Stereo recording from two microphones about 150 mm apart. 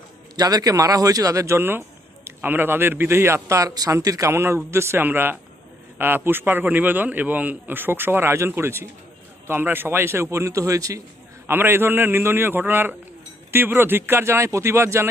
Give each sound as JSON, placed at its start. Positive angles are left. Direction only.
{"t": 0.3, "sound": "a man's voice", "side_deg": -25}